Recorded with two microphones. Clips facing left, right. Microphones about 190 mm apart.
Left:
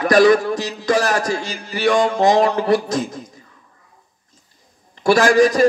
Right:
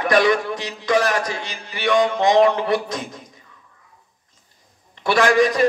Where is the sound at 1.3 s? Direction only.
40° left (ahead or behind).